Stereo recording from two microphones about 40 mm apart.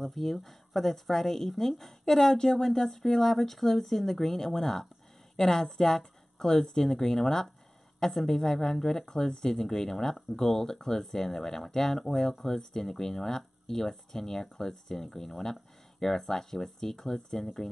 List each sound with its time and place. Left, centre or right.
0.0 s speech: centre